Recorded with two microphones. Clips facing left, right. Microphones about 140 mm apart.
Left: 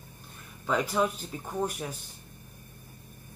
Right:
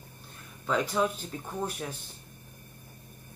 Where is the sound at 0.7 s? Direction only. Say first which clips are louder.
Even; 5° left (ahead or behind).